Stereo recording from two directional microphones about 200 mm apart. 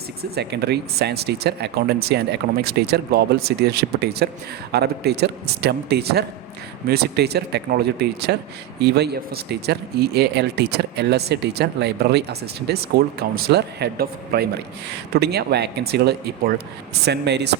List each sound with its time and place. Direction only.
0.2 s speech: 55° right (ahead or behind)